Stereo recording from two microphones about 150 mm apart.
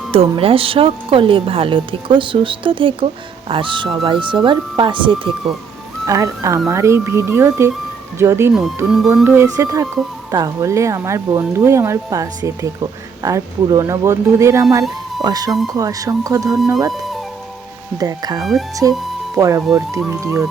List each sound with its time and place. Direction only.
0.1 s speech: 40° right (ahead or behind)
6.1 s speech: 20° right (ahead or behind)
16.9 s music: centre (ahead or behind)
17.9 s speech: 25° right (ahead or behind)